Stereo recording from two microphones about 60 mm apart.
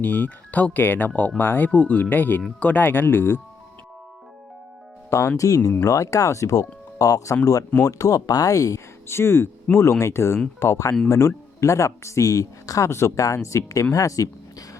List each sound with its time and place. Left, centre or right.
0.0 s speech: left
5.4 s speech: left
9.0 s speech: left
9.7 s speech: centre
10.0 s speech: left
12.9 s speech: left
13.9 s speech: left